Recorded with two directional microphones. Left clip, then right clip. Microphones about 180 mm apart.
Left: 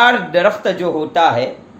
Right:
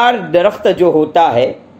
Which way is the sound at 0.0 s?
40° right (ahead or behind).